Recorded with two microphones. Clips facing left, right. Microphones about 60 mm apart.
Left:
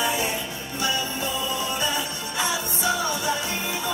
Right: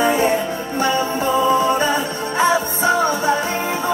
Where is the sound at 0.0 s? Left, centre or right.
Right.